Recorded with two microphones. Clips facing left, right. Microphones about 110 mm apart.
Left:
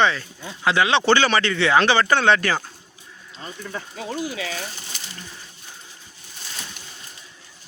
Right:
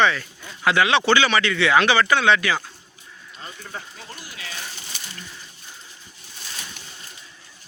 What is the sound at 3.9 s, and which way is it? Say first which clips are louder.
Speech: left 12 dB; 90° left.